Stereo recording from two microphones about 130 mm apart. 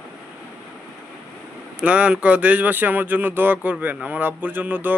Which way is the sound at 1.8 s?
10° right (ahead or behind).